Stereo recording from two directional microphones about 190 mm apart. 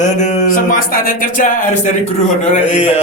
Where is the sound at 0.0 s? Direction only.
40° left (ahead or behind).